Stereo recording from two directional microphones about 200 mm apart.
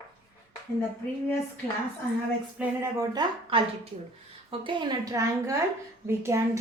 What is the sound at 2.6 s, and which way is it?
Speech, 5° right (ahead or behind).